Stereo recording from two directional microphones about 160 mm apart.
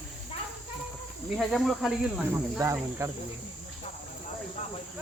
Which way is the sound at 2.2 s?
15° right (ahead or behind).